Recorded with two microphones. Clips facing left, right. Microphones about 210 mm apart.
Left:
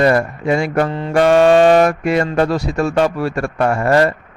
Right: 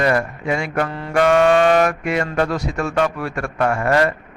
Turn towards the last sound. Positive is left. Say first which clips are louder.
# left 3 dB
turn(degrees=35)  # may be behind; listen again after turning